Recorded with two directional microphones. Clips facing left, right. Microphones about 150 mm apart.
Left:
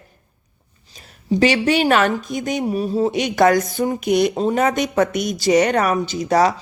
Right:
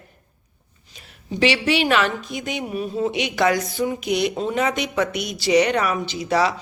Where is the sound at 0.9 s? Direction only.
40° left (ahead or behind).